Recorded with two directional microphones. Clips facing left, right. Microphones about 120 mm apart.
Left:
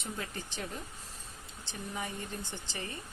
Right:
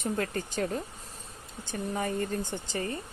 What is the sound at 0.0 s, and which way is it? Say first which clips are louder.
Speech: right 9 dB; 50° right (ahead or behind).